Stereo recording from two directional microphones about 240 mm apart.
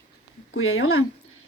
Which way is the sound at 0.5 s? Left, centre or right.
Left.